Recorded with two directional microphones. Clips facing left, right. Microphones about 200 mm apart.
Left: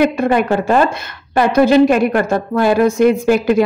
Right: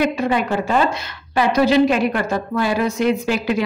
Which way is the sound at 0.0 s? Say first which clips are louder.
Left 5 dB; 55° left (ahead or behind).